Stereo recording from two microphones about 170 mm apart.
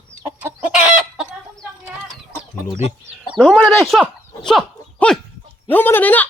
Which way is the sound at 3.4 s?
Centre (ahead or behind).